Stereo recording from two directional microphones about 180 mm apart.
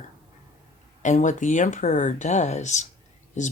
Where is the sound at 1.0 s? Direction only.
45° left (ahead or behind).